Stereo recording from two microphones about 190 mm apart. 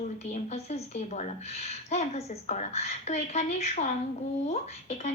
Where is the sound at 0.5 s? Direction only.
35° left (ahead or behind).